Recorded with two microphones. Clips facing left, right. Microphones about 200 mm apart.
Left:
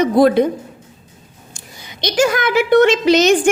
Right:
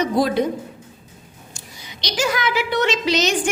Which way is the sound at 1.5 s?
50° left (ahead or behind).